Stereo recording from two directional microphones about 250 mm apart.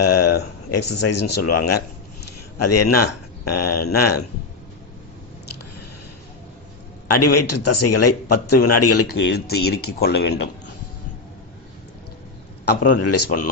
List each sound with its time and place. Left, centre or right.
0.2 s a sound: left
0.7 s a man's voice: left
7.1 s a man's voice: left
9.0 s speech: left
12.6 s speech: left
13.0 s a man's voice: left
13.2 s speech: left